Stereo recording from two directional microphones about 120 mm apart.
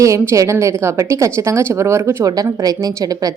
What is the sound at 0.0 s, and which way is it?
A woman's voice, 25° right (ahead or behind).